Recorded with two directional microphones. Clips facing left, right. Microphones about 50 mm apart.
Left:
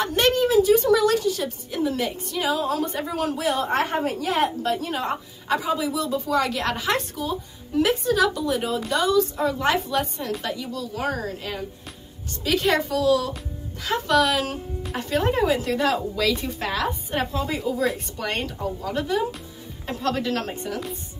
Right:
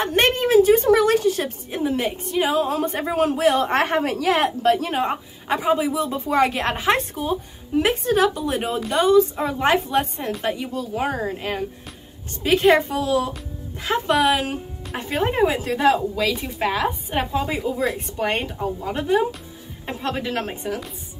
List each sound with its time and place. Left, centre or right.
0.0 s a woman's voice: right
5.0 s a woman's voice: right
12.4 s a woman's voice: right